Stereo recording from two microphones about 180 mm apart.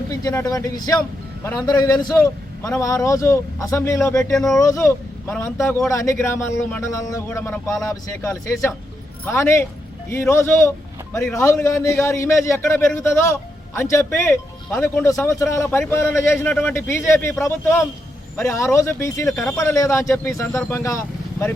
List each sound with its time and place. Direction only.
0.1 s a man's voice: 20° left (ahead or behind)
4.4 s speech: centre (ahead or behind)
4.6 s a man's voice: 15° left (ahead or behind)